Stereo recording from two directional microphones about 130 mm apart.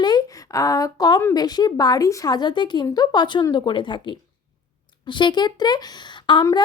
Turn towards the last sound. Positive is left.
turn(degrees=35)  # may be behind; listen again after turning